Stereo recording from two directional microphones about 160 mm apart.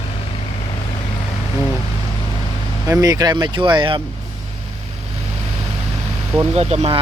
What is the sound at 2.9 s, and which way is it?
Speech, 20° right (ahead or behind).